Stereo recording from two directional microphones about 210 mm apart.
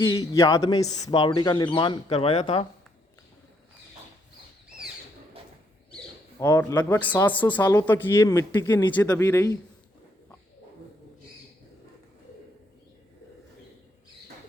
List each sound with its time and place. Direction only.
0.3 s a man's voice: 15° left (ahead or behind)
6.4 s speech: 15° left (ahead or behind)